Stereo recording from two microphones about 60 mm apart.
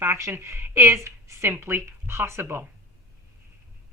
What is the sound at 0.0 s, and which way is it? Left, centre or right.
A woman's voice, right.